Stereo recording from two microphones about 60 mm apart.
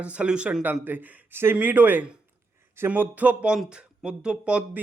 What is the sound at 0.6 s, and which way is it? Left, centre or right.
A man's voice, right.